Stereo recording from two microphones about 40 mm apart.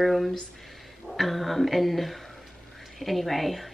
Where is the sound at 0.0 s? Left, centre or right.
Centre.